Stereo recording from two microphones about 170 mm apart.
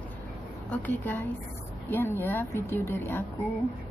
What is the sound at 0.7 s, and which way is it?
A woman's voice, 10° left (ahead or behind).